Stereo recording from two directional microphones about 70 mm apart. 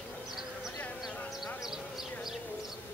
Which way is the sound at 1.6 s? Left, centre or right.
Centre.